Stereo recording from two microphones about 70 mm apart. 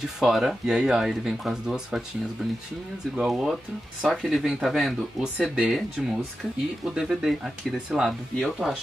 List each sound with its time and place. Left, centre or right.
0.2 s speech: centre
3.3 s speech: centre